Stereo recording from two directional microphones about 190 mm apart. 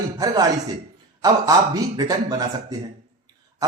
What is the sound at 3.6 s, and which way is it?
Throat clearing, 20° right (ahead or behind).